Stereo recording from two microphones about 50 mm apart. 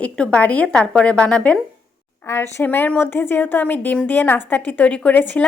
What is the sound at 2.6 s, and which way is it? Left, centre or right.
A woman's voice, left.